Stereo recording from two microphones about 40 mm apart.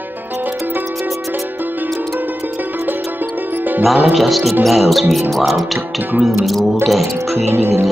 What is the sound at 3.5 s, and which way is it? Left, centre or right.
Music, right.